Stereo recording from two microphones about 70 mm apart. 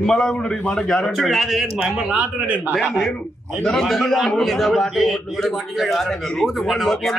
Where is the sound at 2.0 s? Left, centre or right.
Centre.